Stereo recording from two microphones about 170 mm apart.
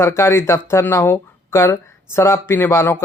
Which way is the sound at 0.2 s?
15° left (ahead or behind).